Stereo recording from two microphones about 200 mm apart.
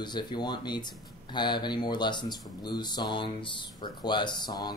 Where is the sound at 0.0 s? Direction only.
20° left (ahead or behind).